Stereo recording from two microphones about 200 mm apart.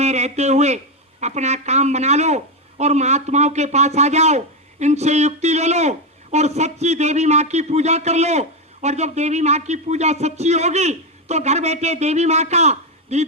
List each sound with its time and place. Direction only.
0.0 s a woman's voice: 35° right (ahead or behind)